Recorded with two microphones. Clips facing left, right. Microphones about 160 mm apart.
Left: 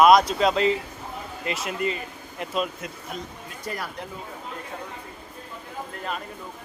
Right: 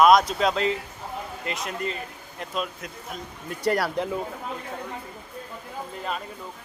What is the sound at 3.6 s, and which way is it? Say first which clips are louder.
Speech: right 10 dB; 75° right (ahead or behind).